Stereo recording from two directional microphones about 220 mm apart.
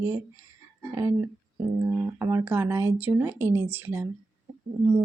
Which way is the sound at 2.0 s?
10° right (ahead or behind).